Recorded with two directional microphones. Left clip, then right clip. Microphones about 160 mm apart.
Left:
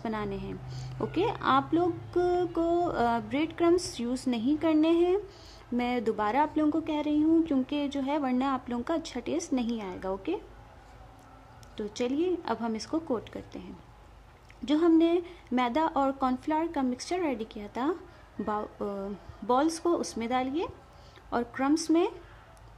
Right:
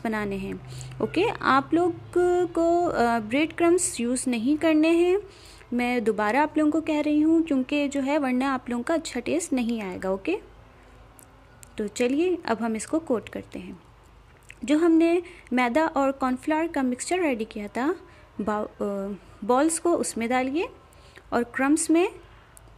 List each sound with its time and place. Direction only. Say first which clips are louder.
0.0 s a woman's voice: right 5 dB; 25° right (ahead or behind)
4.6 s a woman's voice: right 4 dB; 20° right (ahead or behind)
11.7 s a woman's voice: right 6 dB; 20° right (ahead or behind)
14.7 s a woman's voice: right 3 dB; 20° right (ahead or behind)